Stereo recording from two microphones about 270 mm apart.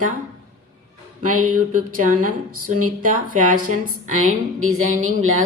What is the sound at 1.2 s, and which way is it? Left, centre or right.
Music, right.